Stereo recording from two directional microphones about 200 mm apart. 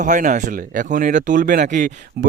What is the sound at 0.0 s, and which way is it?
Speech, 40° right (ahead or behind).